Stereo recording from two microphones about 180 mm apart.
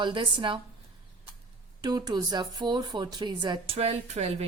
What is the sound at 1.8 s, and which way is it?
Speech, 20° right (ahead or behind).